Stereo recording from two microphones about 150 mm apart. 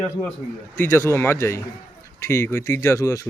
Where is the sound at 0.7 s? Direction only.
15° left (ahead or behind).